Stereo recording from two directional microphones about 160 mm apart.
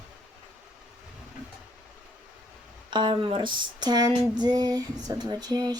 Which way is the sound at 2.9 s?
30° right (ahead or behind).